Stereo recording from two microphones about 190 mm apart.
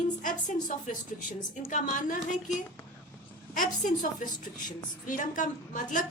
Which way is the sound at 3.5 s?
45° left (ahead or behind).